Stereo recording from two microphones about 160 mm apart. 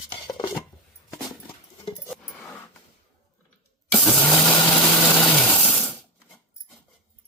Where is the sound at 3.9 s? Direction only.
5° left (ahead or behind).